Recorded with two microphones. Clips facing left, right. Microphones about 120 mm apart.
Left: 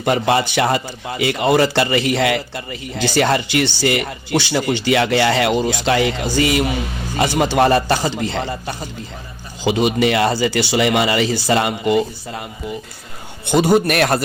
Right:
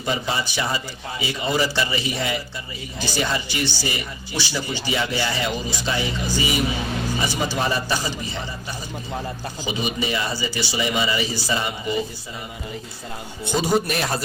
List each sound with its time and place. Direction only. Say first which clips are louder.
0.0 s a man's voice: left 9 dB; 65° left (ahead or behind); by 6.7 s 85° left
7.2 s speech: left 12 dB; 65° left (ahead or behind)
13.5 s a man's voice: left 7 dB; 65° left (ahead or behind)